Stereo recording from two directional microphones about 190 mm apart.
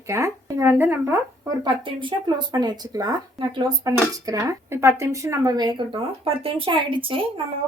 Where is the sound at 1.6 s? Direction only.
25° right (ahead or behind).